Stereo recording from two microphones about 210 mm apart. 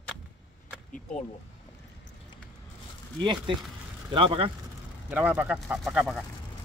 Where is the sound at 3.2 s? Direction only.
20° right (ahead or behind).